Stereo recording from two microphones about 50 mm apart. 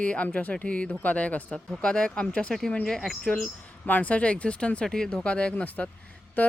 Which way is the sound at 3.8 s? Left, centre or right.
Left.